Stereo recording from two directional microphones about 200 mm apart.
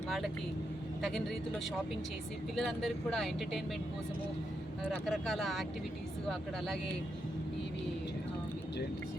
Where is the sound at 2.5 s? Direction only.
Centre (ahead or behind).